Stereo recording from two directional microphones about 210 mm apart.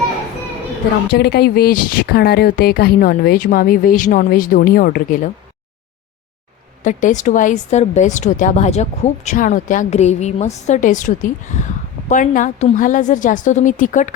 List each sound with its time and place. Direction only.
1.1 s speech: 50° left (ahead or behind)
6.8 s a woman's voice: 35° left (ahead or behind)